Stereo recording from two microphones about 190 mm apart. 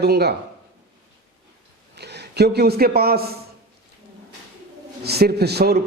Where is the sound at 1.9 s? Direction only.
60° right (ahead or behind).